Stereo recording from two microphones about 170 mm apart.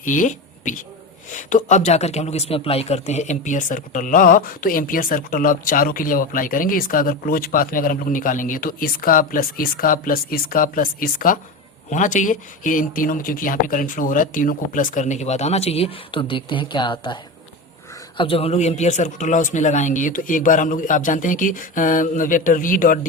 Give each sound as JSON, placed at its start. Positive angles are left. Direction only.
{"t": 0.0, "sound": "a sound", "side_deg": 50}
{"t": 1.3, "sound": "speech", "side_deg": 50}
{"t": 18.2, "sound": "speech", "side_deg": 35}